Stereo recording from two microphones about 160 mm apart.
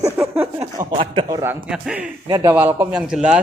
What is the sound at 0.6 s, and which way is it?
Speech, 35° right (ahead or behind).